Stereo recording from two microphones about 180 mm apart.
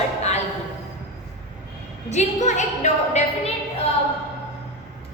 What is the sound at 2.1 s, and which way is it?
A woman's voice, 40° left (ahead or behind).